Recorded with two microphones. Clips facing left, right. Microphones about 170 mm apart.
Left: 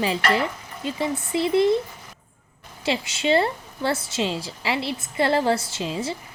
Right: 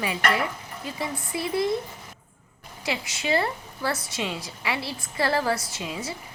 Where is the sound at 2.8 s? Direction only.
30° left (ahead or behind).